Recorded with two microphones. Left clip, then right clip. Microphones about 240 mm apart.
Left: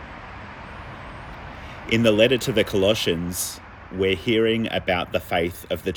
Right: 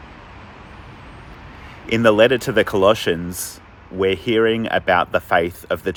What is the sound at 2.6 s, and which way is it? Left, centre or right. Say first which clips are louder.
Speech: right 5 dB; centre.